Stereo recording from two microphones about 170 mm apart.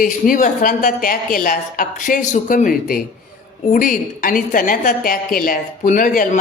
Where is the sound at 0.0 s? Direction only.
50° left (ahead or behind).